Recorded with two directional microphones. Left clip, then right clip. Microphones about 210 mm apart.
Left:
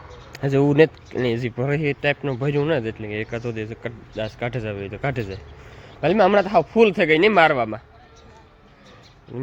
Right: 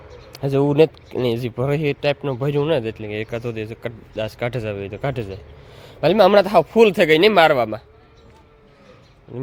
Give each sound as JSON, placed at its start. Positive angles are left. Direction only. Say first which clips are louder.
{"t": 0.3, "sound": "speech", "louder": "right 1 dB", "side_deg": 0}
{"t": 6.0, "sound": "speech", "louder": "right 4 dB", "side_deg": -15}
{"t": 9.3, "sound": "speech", "louder": "right 1 dB", "side_deg": -5}